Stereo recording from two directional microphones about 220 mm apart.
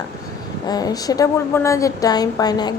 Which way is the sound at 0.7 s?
15° left (ahead or behind).